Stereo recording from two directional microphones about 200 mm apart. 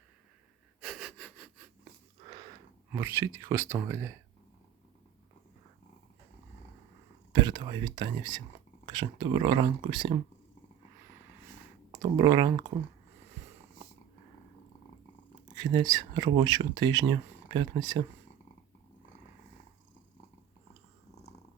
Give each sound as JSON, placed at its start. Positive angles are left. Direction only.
{"t": 0.8, "sound": "sniff", "side_deg": 0}
{"t": 2.9, "sound": "speech", "side_deg": -10}
{"t": 7.3, "sound": "speech", "side_deg": -20}
{"t": 11.9, "sound": "speech", "side_deg": -20}
{"t": 15.5, "sound": "speech", "side_deg": -20}